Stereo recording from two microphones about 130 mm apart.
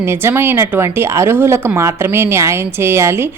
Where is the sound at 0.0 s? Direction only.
20° right (ahead or behind).